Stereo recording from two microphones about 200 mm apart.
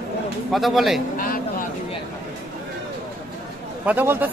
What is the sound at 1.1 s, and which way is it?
Vehicle, 45° left (ahead or behind).